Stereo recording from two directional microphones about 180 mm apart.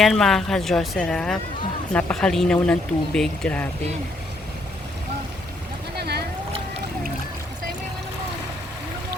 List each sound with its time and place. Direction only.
0.0 s speech: centre (ahead or behind)
6.0 s vehicle: 65° right (ahead or behind)